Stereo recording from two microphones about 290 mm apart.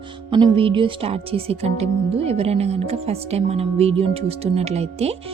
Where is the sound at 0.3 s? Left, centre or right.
Centre.